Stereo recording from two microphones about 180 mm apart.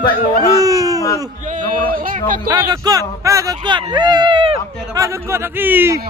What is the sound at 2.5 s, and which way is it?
Speech, 20° right (ahead or behind).